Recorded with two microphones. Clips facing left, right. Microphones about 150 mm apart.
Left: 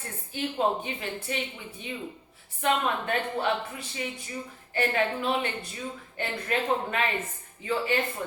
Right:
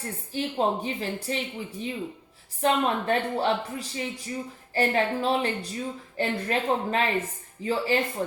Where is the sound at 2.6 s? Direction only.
35° right (ahead or behind).